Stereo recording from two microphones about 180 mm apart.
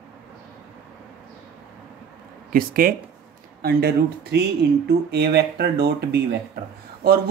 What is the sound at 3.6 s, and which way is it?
Speech, 65° right (ahead or behind).